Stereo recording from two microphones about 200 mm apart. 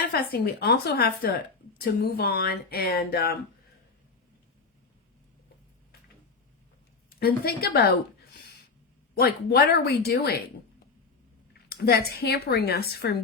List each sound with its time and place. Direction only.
0.1 s a woman's voice: 50° left (ahead or behind)
7.2 s a woman's voice: 50° left (ahead or behind)
11.7 s a woman's voice: 50° left (ahead or behind)